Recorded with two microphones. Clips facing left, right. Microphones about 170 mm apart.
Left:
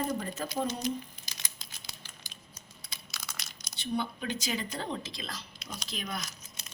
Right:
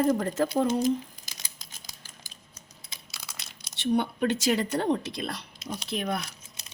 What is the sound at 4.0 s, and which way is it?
A woman's voice, 75° right (ahead or behind).